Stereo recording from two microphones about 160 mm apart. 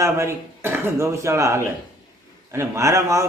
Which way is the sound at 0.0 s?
15° right (ahead or behind).